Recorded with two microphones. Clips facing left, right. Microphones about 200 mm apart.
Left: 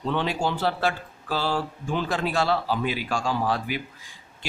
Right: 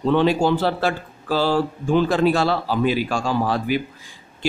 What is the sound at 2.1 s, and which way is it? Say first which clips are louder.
Speech: right 6 dB; 35° right (ahead or behind).